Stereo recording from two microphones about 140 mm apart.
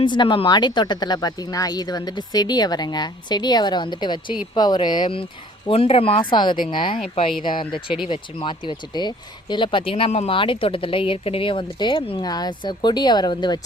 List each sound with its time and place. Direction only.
0.0 s speech: 35° left (ahead or behind)